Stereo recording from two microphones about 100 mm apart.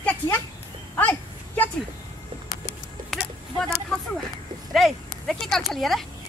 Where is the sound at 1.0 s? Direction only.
15° left (ahead or behind).